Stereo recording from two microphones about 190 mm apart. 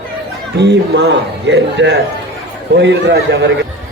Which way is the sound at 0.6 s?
65° right (ahead or behind).